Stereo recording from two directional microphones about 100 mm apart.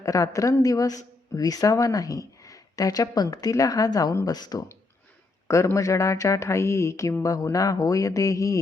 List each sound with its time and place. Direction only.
0.0 s speech: 35° left (ahead or behind)